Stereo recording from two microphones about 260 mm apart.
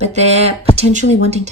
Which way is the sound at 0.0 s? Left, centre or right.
Right.